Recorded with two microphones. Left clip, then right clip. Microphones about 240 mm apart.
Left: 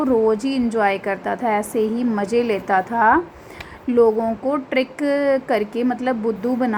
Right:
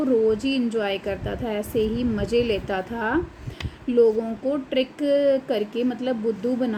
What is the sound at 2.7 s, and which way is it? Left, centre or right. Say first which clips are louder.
Speech: left 10 dB; centre.